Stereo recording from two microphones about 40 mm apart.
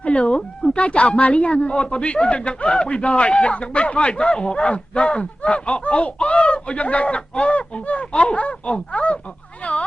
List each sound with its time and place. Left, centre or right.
0.0 s a woman's voice: left